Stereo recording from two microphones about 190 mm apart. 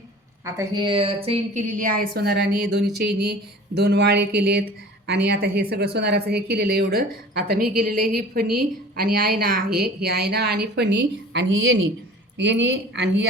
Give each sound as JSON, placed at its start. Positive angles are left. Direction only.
{"t": 0.4, "sound": "a woman's voice", "side_deg": -20}